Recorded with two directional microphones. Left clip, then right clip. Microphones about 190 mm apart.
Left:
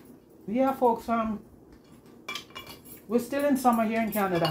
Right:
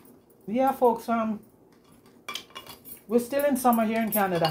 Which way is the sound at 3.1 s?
5° right (ahead or behind).